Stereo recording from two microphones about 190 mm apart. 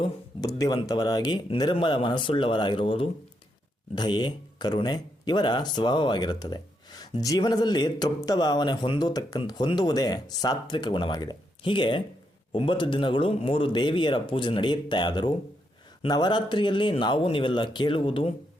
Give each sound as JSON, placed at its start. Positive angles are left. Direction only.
{"t": 0.0, "sound": "speech", "side_deg": 20}